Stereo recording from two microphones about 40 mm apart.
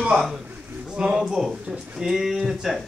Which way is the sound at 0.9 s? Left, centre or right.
Centre.